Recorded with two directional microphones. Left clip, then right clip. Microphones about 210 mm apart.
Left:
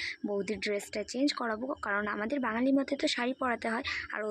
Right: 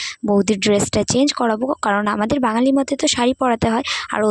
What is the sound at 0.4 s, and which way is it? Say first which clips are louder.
Speech: right 18 dB; 55° right (ahead or behind).